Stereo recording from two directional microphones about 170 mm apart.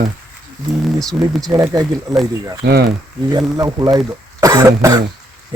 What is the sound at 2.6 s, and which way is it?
Speech, 70° right (ahead or behind).